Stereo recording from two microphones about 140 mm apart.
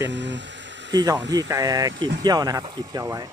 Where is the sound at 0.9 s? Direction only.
30° right (ahead or behind).